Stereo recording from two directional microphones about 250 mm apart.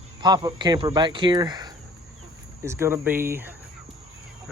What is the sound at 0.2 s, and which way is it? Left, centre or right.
Speech, centre.